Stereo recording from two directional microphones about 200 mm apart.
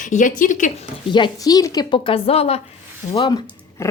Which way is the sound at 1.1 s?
25° left (ahead or behind).